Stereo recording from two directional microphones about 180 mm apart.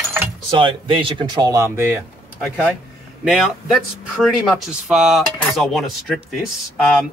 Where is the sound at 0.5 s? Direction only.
25° right (ahead or behind).